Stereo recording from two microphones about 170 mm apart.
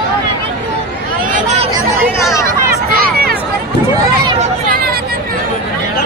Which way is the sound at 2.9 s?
60° right (ahead or behind).